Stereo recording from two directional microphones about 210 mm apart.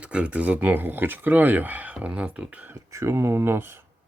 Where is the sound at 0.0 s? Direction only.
5° right (ahead or behind).